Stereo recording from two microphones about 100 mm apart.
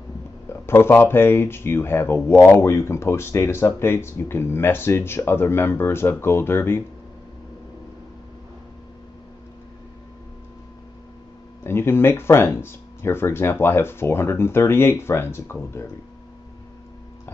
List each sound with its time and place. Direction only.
0.5 s speech: 25° left (ahead or behind)
11.6 s speech: 25° left (ahead or behind)